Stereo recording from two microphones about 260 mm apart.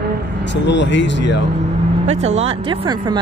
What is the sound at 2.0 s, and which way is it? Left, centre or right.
Speech, right.